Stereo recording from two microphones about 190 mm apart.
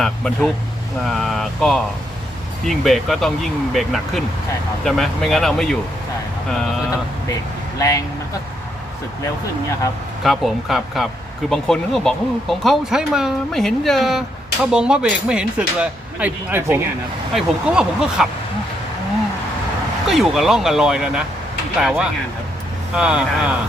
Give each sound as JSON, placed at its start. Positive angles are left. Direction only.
{"t": 0.0, "sound": "speech", "side_deg": 5}
{"t": 7.8, "sound": "speech", "side_deg": 15}
{"t": 10.2, "sound": "speech", "side_deg": 0}
{"t": 20.1, "sound": "speech", "side_deg": 0}